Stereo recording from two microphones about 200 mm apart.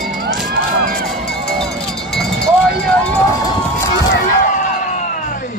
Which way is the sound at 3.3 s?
15° left (ahead or behind).